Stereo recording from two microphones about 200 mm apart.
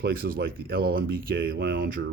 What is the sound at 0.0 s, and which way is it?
Speech, 50° right (ahead or behind).